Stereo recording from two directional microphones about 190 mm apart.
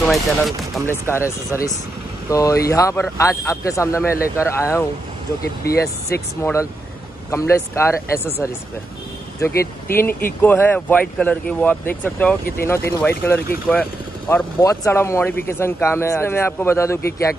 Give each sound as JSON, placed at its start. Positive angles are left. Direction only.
{"t": 0.0, "sound": "speech", "side_deg": 0}
{"t": 0.8, "sound": "speech", "side_deg": 15}